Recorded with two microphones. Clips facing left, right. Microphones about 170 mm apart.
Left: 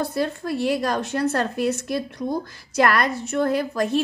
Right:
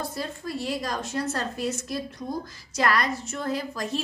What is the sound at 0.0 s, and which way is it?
A woman's voice, 65° left (ahead or behind).